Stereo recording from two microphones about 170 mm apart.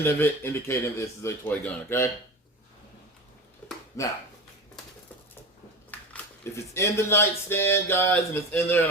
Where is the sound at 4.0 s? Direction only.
20° left (ahead or behind).